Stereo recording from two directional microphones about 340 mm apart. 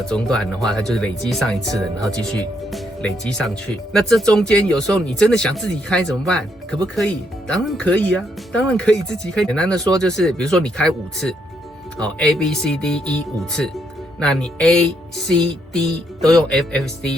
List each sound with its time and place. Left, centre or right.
0.0 s speech: centre